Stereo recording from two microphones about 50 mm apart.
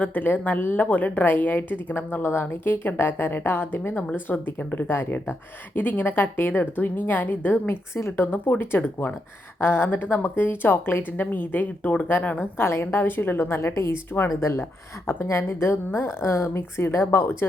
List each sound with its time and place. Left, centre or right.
0.0 s a woman's voice: left
7.7 s a woman's voice: left
8.1 s a woman's voice: left
12.4 s a woman's voice: left